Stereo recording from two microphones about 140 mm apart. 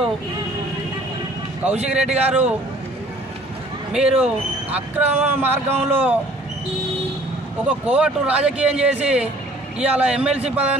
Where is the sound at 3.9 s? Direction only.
5° right (ahead or behind).